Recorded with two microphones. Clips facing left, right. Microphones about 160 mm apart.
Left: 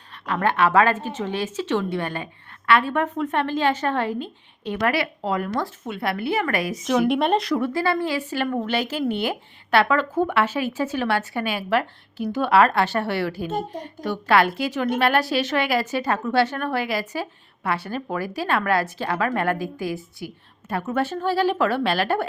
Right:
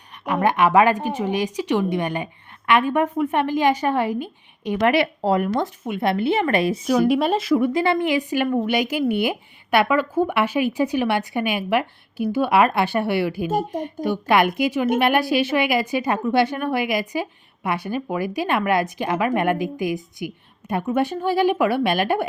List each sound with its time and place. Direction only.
0.3 s a woman's voice: 15° right (ahead or behind)
7.0 s speech: centre (ahead or behind)
7.6 s a woman's voice: 20° right (ahead or behind)